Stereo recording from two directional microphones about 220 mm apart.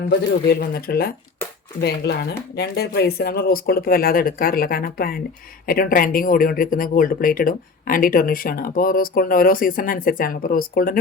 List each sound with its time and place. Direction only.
0.1 s speech: 45° left (ahead or behind)